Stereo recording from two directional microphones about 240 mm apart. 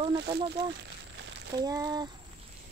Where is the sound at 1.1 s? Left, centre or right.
Right.